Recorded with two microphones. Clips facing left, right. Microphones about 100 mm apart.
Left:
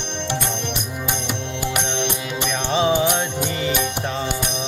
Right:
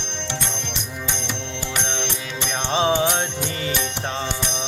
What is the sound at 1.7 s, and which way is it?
Music, 10° left (ahead or behind).